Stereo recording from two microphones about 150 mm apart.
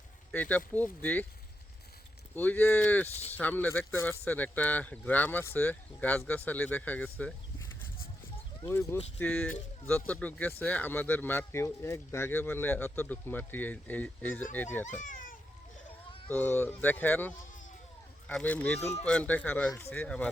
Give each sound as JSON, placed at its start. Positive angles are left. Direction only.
{"t": 0.3, "sound": "speech", "side_deg": 10}
{"t": 2.3, "sound": "speech", "side_deg": 10}
{"t": 3.1, "sound": "speech", "side_deg": 45}
{"t": 3.3, "sound": "speech", "side_deg": 10}
{"t": 8.6, "sound": "speech", "side_deg": 15}
{"t": 14.8, "sound": "a sound", "side_deg": 60}
{"t": 16.3, "sound": "speech", "side_deg": 15}